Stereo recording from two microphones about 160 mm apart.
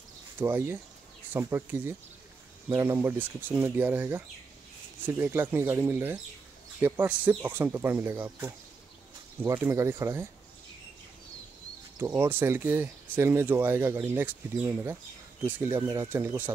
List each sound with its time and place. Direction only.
0.4 s speech: 15° right (ahead or behind)
12.0 s speech: 15° right (ahead or behind)